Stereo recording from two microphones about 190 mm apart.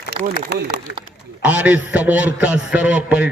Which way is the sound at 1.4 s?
5° right (ahead or behind).